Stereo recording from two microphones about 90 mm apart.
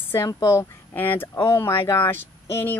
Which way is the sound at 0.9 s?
20° left (ahead or behind).